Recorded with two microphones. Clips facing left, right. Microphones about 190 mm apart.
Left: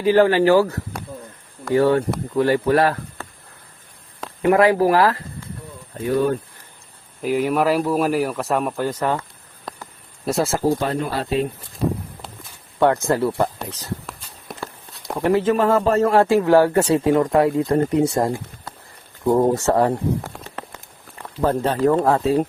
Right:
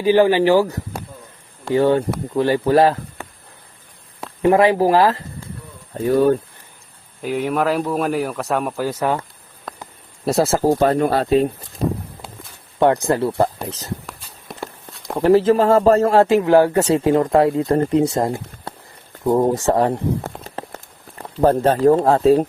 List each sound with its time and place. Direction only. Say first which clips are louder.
0.0 s speech: right 1 dB; 15° right (ahead or behind)
3.2 s a sound: right 1 dB; 15° right (ahead or behind)
4.4 s speech: right 1 dB; 20° right (ahead or behind)
7.2 s speech: left 1 dB; centre (ahead or behind)
10.2 s speech: right 3 dB; 35° right (ahead or behind)
12.8 s speech: right 1 dB; 20° right (ahead or behind)
14.5 s walk: right 1 dB; centre (ahead or behind)
15.2 s speech: right 4 dB; 30° right (ahead or behind)
19.5 s speech: even; 15° right (ahead or behind)
21.2 s speech: right 4 dB; 40° right (ahead or behind)
21.8 s speech: right 3 dB; 30° right (ahead or behind)